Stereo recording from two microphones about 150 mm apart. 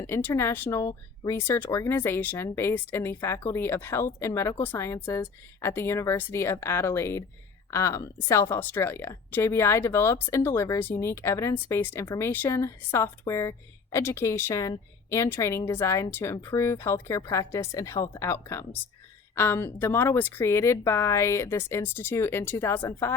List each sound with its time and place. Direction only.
0.0 s speech: 15° left (ahead or behind)